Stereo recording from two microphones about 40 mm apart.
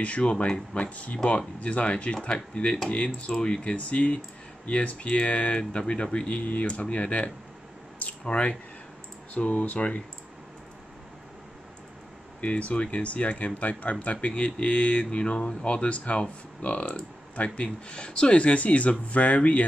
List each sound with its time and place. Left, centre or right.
0.0 s speech: left
6.2 s speech: left
12.4 s speech: left
15.0 s speech: left
17.4 s speech: left
17.8 s speech: left